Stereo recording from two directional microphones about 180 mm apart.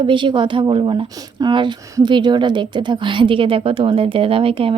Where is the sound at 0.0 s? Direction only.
25° right (ahead or behind).